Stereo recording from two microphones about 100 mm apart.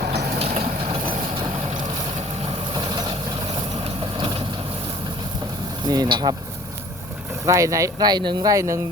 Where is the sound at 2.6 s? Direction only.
50° right (ahead or behind).